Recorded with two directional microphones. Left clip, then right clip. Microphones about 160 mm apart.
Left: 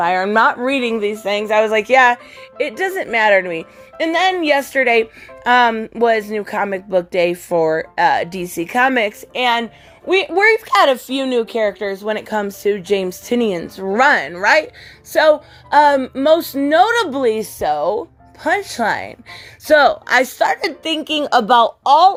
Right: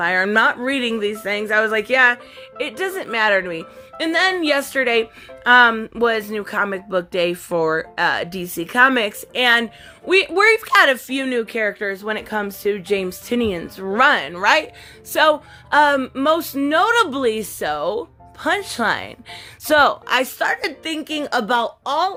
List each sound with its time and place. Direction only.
0.0 s a woman's voice: centre (ahead or behind)
11.1 s speech: 25° right (ahead or behind)
11.4 s a woman's voice: 15° left (ahead or behind)
20.1 s a woman's voice: 25° left (ahead or behind)